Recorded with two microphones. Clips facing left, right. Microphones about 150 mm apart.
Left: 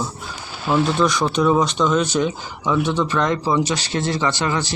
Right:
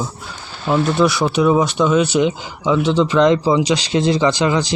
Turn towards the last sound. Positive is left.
turn(degrees=-15)  # may be behind; listen again after turning